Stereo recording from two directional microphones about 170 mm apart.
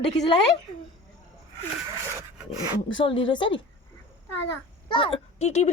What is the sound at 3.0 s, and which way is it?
Speech, 30° left (ahead or behind).